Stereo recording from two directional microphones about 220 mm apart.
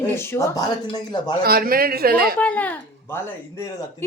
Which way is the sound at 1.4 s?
45° right (ahead or behind).